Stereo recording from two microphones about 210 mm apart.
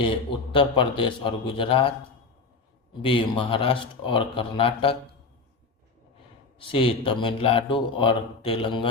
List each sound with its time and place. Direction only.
0.5 s speech: 25° left (ahead or behind)
3.0 s speech: 25° left (ahead or behind)
6.7 s speech: 25° left (ahead or behind)